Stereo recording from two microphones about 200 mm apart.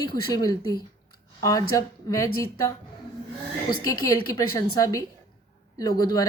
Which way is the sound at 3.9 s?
15° left (ahead or behind).